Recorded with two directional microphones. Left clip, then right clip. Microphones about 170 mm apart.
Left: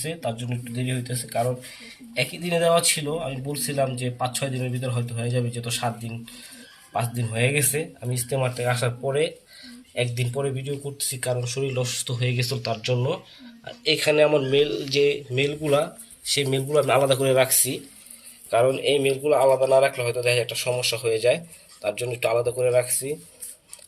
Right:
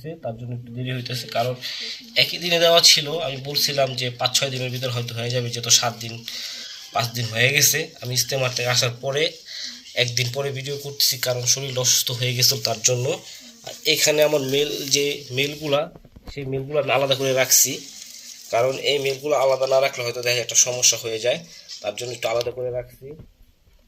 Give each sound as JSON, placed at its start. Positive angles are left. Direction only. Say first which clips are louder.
{"t": 0.9, "sound": "speech", "louder": "right 6 dB", "side_deg": 5}
{"t": 16.3, "sound": "speech", "louder": "left 3 dB", "side_deg": 35}
{"t": 22.5, "sound": "speech", "louder": "left 7 dB", "side_deg": 25}